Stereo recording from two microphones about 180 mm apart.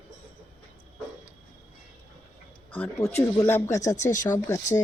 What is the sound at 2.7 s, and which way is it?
Speech, 10° left (ahead or behind).